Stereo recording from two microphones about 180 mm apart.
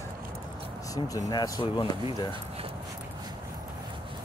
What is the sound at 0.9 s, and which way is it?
Speech, 20° left (ahead or behind).